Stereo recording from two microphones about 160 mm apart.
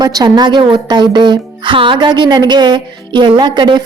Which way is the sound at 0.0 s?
25° right (ahead or behind).